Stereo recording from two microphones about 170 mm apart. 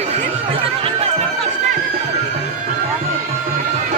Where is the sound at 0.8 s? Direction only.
40° right (ahead or behind).